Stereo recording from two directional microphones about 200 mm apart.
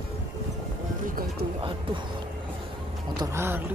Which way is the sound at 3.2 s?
15° right (ahead or behind).